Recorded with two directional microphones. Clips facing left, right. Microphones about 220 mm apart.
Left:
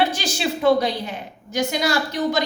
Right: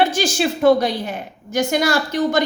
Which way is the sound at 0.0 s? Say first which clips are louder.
Right 4 dB; 50° right (ahead or behind).